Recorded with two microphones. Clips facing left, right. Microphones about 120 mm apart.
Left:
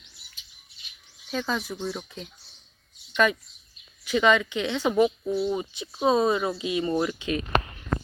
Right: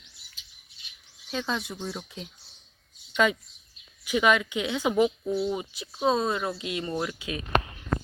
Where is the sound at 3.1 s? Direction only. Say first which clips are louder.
Left 1 dB; 15° right (ahead or behind).